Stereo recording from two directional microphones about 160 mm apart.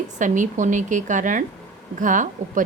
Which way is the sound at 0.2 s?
50° right (ahead or behind).